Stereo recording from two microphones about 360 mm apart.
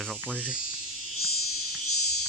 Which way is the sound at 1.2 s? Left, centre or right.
Left.